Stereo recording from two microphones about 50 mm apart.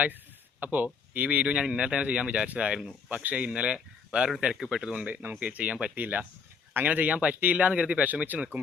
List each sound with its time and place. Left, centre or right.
0.6 s speech: right; by 4.9 s centre
4.9 s speech: right
6.0 s speech: right